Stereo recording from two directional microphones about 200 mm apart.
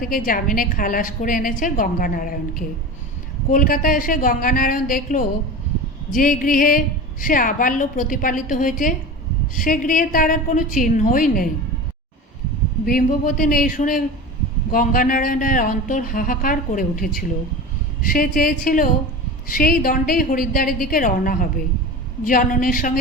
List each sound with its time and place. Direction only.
0.0 s a woman's voice: 45° left (ahead or behind)
12.8 s a woman's voice: 45° left (ahead or behind)